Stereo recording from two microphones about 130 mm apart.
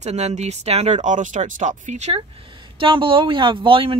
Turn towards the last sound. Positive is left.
turn(degrees=-45)  # may be behind; listen again after turning